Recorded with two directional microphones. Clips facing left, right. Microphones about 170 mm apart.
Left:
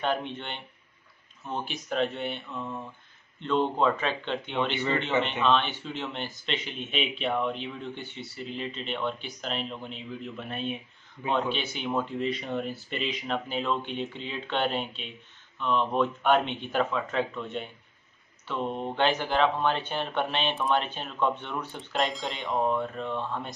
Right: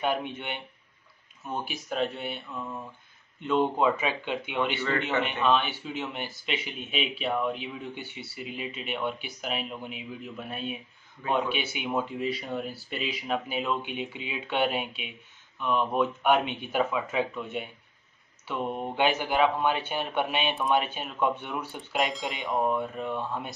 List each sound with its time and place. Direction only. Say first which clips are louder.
0.0 s speech: even; 10° right (ahead or behind)
4.7 s speech: left 1 dB; 20° left (ahead or behind)
5.4 s speech: even; 10° right (ahead or behind)